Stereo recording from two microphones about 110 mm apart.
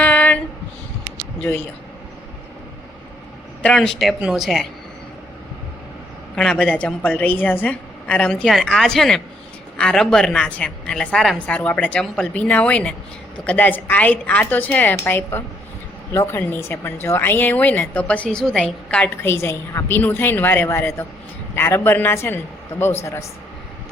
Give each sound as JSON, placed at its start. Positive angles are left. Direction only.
{"t": 0.0, "sound": "a sound", "side_deg": 15}
{"t": 3.6, "sound": "speech", "side_deg": 5}
{"t": 6.3, "sound": "a woman's voice", "side_deg": 5}
{"t": 19.1, "sound": "a woman's voice", "side_deg": 20}